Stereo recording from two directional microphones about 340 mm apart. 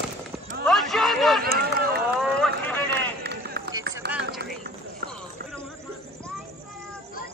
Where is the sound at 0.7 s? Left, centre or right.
Centre.